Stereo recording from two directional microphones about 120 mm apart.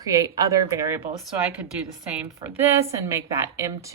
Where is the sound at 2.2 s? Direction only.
15° right (ahead or behind).